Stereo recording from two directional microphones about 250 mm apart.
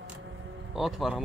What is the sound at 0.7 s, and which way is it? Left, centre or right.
Speech, centre.